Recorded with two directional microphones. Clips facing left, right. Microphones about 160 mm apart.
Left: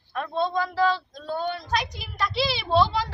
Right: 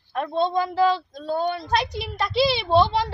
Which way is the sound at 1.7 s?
30° right (ahead or behind).